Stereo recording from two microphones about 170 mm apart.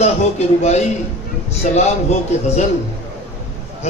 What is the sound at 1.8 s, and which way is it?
Speech, 40° left (ahead or behind).